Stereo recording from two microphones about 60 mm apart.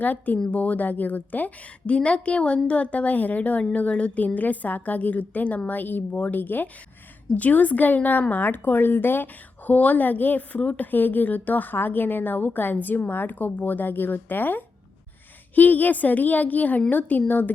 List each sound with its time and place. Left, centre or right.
0.0 s a woman's voice: left